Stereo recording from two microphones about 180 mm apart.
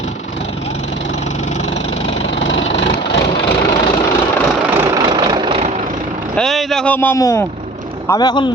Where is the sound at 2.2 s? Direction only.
90° left.